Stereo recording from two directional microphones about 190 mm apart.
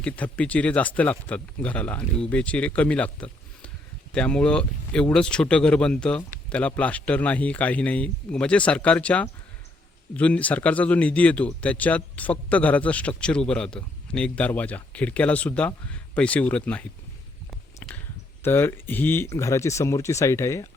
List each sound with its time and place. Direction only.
0.0 s speech: 5° left (ahead or behind)
17.8 s a sound: 10° left (ahead or behind)
18.4 s speech: 10° left (ahead or behind)